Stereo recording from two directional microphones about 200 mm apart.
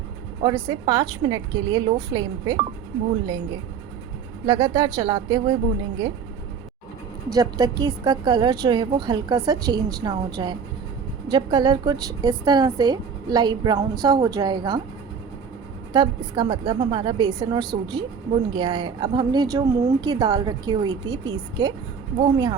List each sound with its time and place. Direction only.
0.4 s a woman's voice: 20° right (ahead or behind)
7.3 s a woman's voice: 20° right (ahead or behind)
15.9 s a woman's voice: 20° right (ahead or behind)